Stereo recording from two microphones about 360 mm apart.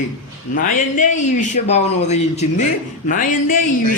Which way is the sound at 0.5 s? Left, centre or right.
Left.